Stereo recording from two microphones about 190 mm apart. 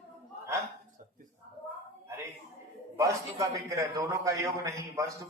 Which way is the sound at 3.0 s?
20° right (ahead or behind).